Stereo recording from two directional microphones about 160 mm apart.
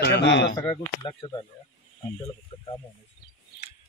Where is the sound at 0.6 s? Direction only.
30° left (ahead or behind).